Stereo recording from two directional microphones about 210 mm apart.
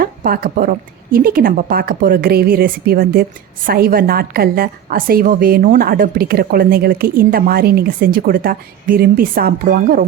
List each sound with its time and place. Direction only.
0.0 s a woman's voice: 45° right (ahead or behind)